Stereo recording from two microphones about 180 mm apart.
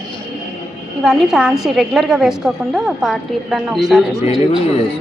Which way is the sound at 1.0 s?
5° right (ahead or behind).